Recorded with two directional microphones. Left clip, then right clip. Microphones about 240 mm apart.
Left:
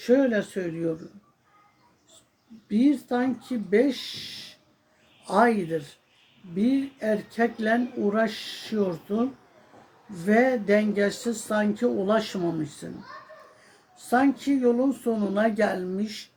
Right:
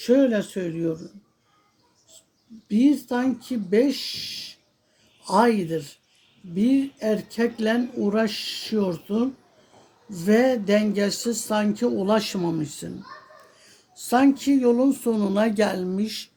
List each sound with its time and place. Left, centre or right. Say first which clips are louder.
0.0 s speech: right 2 dB; right
2.6 s speech: right 2 dB; right
13.9 s speech: right 3 dB; right